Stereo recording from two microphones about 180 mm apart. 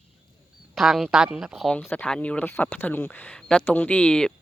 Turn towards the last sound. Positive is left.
turn(degrees=5)  # may be behind; listen again after turning